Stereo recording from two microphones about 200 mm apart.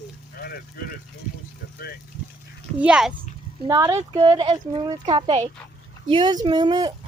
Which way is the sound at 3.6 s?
15° right (ahead or behind).